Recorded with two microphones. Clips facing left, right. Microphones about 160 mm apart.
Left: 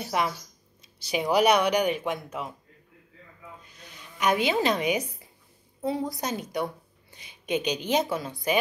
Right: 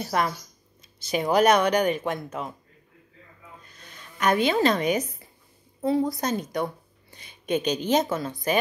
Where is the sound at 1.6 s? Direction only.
10° left (ahead or behind).